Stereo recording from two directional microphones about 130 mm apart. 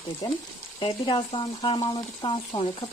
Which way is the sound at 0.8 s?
40° left (ahead or behind).